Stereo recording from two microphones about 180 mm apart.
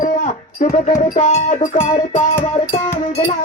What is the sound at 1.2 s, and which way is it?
Music, 35° left (ahead or behind).